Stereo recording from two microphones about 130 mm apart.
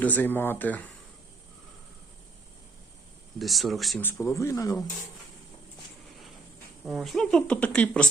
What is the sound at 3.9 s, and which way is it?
Speech, 15° left (ahead or behind).